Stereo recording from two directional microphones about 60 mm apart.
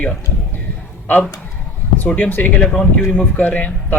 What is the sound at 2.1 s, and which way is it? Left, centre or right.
Speech, left.